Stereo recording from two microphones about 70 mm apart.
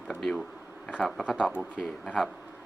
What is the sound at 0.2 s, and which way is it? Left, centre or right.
Speech, centre.